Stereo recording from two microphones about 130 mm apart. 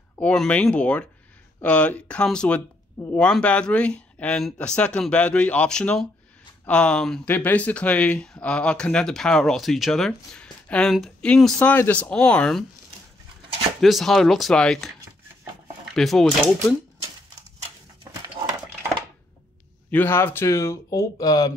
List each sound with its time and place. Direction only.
0.2 s speech: 10° left (ahead or behind)
13.7 s speech: centre (ahead or behind)
15.9 s speech: centre (ahead or behind)
19.9 s speech: 15° left (ahead or behind)